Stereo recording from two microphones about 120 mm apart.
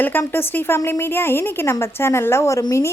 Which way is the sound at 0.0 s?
15° left (ahead or behind).